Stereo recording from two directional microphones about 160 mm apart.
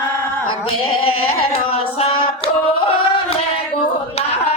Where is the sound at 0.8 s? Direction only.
35° left (ahead or behind).